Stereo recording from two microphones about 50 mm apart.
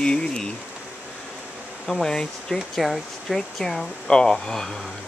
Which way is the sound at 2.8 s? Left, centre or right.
Centre.